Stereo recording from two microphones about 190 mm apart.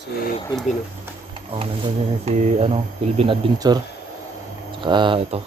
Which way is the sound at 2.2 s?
35° right (ahead or behind).